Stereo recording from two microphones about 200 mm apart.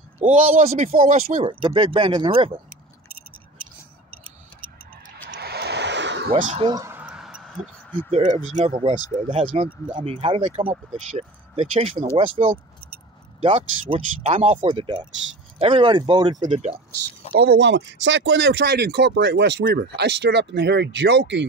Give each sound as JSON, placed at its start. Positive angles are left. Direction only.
{"t": 0.2, "sound": "speech", "side_deg": -40}
{"t": 1.5, "sound": "speech", "side_deg": -25}
{"t": 5.3, "sound": "vehicle", "side_deg": -55}
{"t": 6.3, "sound": "speech", "side_deg": -40}
{"t": 6.6, "sound": "a sound", "side_deg": -20}
{"t": 8.1, "sound": "speech", "side_deg": -25}
{"t": 16.4, "sound": "speech", "side_deg": -35}
{"t": 17.4, "sound": "speech", "side_deg": -55}